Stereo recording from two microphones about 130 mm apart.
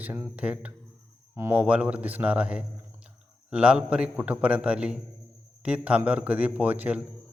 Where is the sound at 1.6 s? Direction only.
10° right (ahead or behind).